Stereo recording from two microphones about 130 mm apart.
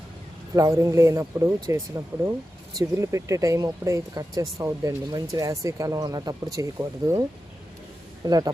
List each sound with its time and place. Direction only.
0.5 s speech: 25° right (ahead or behind)